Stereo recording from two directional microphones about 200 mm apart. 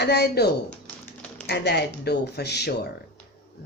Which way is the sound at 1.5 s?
55° left (ahead or behind).